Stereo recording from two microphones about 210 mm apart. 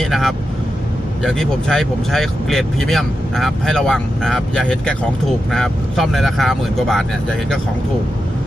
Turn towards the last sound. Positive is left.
turn(degrees=0)  # may be behind; listen again after turning